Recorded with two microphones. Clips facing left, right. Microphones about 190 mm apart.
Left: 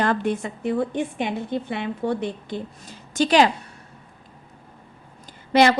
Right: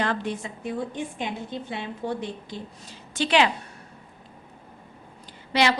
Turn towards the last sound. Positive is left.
turn(degrees=50)  # may be behind; listen again after turning